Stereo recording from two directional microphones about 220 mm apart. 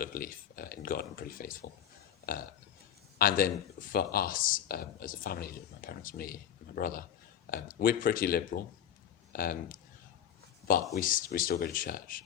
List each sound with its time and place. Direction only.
0.0 s a sound: 40° left (ahead or behind)
3.2 s speech: 40° left (ahead or behind)
10.9 s speech: 40° left (ahead or behind)